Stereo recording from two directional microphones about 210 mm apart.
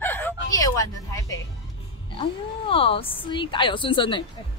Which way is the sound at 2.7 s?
25° left (ahead or behind).